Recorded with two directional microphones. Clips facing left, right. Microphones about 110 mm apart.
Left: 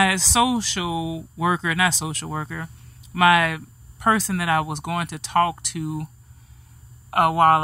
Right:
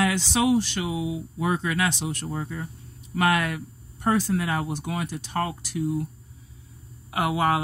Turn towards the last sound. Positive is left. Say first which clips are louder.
# left 7 dB
turn(degrees=50)  # may be behind; listen again after turning